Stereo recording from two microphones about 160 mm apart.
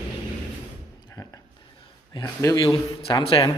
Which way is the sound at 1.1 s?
25° left (ahead or behind).